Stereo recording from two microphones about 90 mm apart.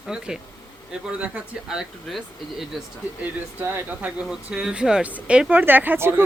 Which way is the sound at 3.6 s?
25° right (ahead or behind).